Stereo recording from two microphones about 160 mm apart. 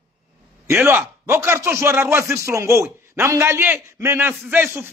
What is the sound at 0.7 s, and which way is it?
Speech, 15° right (ahead or behind).